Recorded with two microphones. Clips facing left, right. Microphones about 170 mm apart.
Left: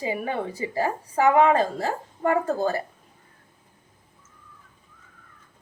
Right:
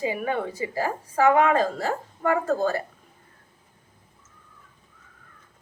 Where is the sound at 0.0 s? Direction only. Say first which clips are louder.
Right 1 dB; 30° left (ahead or behind).